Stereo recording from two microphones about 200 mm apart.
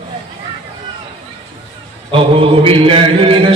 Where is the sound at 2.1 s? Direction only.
25° right (ahead or behind).